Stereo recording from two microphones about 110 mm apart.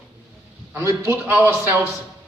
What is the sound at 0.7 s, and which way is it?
Speech, 25° right (ahead or behind).